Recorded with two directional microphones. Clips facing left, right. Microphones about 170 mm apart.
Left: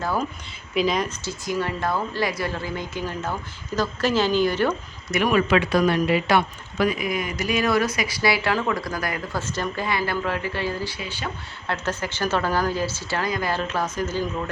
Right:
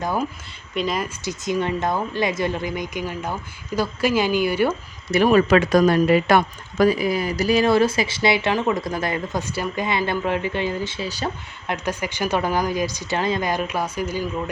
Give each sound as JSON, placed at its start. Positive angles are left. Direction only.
{"t": 0.0, "sound": "speech", "side_deg": -15}
{"t": 0.7, "sound": "speech", "side_deg": 0}
{"t": 1.2, "sound": "speech", "side_deg": -20}
{"t": 5.1, "sound": "speech", "side_deg": -35}
{"t": 11.7, "sound": "speech", "side_deg": -15}